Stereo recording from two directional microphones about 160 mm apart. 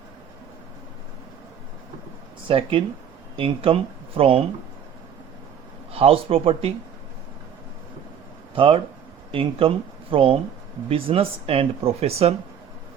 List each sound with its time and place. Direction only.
2.5 s speech: 35° right (ahead or behind)
5.9 s speech: 35° right (ahead or behind)
8.5 s speech: 35° right (ahead or behind)